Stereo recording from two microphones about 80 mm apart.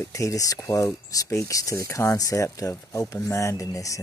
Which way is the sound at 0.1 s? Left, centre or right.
Left.